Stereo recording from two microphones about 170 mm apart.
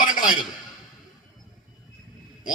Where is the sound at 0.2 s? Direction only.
50° left (ahead or behind).